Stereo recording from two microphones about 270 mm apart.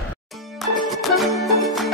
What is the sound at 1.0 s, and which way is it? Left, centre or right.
Music, centre.